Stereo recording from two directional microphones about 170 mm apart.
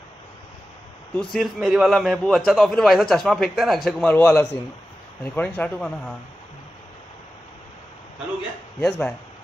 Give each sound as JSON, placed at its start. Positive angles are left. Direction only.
{"t": 1.3, "sound": "a man's voice", "side_deg": 0}
{"t": 8.8, "sound": "a man's voice", "side_deg": 5}